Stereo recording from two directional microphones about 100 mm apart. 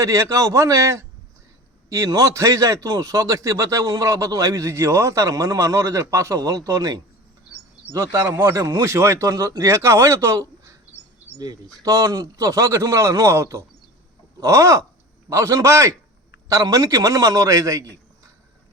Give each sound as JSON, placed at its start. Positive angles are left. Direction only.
{"t": 0.0, "sound": "a man's voice", "side_deg": -30}